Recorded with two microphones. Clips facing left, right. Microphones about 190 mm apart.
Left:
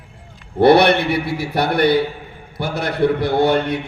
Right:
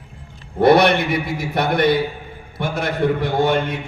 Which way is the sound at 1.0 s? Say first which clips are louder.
Left 2 dB; 35° left (ahead or behind).